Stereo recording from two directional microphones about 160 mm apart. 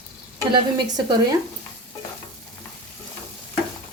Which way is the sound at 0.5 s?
25° right (ahead or behind).